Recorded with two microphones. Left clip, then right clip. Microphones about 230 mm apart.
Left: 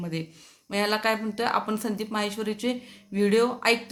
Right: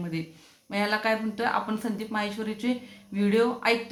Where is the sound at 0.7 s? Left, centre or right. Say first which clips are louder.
Left 1 dB; left.